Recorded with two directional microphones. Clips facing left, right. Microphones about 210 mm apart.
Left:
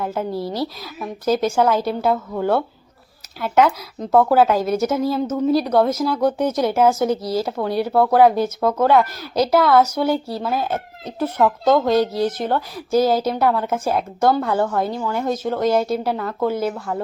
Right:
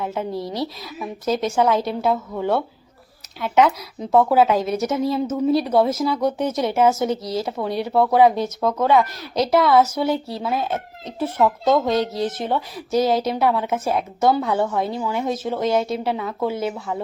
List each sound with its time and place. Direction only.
0.0 s a woman's voice: centre (ahead or behind)